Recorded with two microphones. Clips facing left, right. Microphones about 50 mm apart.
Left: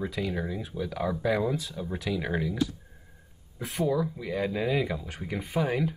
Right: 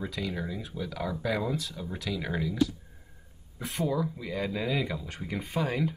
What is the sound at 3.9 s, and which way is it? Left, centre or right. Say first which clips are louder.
Speech: left 3 dB; left.